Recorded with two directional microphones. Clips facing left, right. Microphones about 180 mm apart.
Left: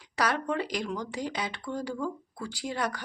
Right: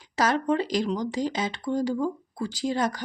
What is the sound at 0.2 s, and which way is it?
Speech, 25° right (ahead or behind).